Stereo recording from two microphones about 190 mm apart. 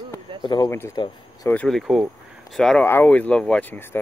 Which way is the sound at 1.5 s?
5° left (ahead or behind).